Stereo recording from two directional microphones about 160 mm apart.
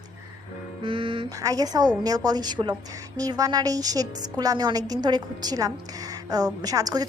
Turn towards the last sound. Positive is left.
turn(degrees=-25)  # may be behind; listen again after turning